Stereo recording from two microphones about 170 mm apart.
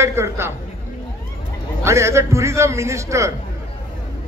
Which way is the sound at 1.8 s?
15° right (ahead or behind).